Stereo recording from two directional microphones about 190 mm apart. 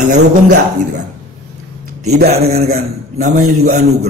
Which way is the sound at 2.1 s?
50° right (ahead or behind).